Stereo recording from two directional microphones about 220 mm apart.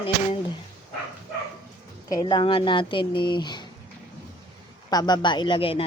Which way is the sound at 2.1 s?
20° left (ahead or behind).